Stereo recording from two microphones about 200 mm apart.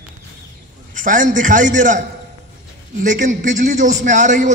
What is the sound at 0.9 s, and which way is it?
A man's voice, 40° right (ahead or behind).